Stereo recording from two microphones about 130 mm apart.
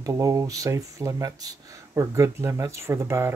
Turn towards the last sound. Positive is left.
turn(degrees=-20)  # may be behind; listen again after turning